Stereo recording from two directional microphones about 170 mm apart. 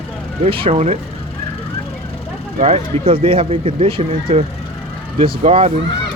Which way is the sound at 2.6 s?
35° right (ahead or behind).